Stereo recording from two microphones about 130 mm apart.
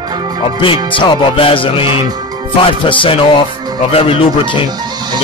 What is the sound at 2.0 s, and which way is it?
Music, 30° right (ahead or behind).